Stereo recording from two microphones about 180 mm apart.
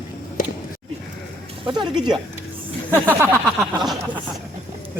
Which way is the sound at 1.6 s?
25° right (ahead or behind).